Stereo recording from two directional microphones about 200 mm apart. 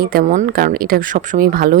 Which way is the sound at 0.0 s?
45° right (ahead or behind).